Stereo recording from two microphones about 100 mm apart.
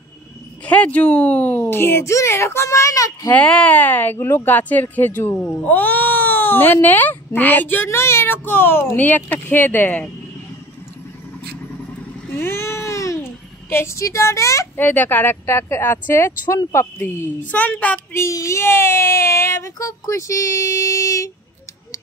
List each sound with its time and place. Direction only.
0.7 s speech: 15° left (ahead or behind); by 3.3 s 35° left (ahead or behind)
3.3 s speech: 10° left (ahead or behind)
12.3 s a sound: 20° left (ahead or behind)
14.8 s speech: 20° left (ahead or behind)
18.1 s speech: 30° left (ahead or behind)